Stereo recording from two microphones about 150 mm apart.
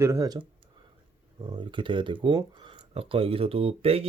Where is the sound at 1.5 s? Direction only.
35° right (ahead or behind).